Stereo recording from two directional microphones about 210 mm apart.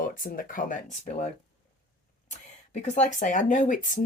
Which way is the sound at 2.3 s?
35° left (ahead or behind).